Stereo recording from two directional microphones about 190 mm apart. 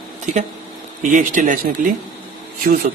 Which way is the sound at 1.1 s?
40° right (ahead or behind).